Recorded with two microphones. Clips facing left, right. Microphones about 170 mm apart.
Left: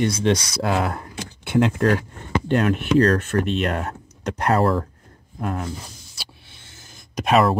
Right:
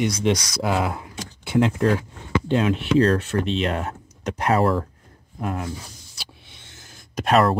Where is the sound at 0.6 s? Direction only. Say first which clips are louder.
Even; 5° right (ahead or behind).